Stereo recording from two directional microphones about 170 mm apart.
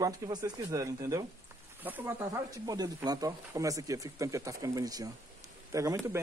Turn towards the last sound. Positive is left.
turn(degrees=-20)  # may be behind; listen again after turning